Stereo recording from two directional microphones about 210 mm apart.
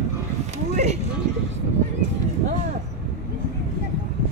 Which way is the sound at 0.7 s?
30° right (ahead or behind).